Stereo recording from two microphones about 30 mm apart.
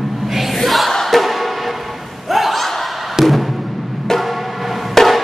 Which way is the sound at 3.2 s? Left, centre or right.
Centre.